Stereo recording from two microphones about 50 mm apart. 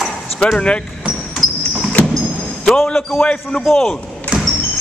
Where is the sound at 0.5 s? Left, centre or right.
Left.